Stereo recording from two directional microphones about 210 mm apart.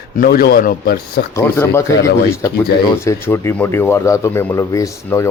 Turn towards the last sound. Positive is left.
turn(degrees=10)  # may be behind; listen again after turning